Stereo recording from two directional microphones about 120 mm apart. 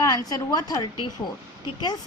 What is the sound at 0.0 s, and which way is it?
A woman's voice, 30° left (ahead or behind).